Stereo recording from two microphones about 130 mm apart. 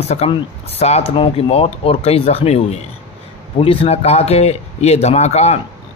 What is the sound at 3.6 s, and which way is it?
Speech, 45° left (ahead or behind).